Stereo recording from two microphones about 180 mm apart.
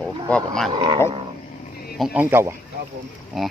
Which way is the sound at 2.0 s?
5° right (ahead or behind).